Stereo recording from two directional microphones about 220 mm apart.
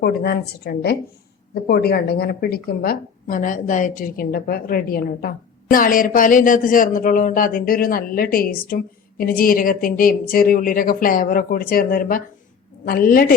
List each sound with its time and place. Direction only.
0.0 s speech: 45° left (ahead or behind)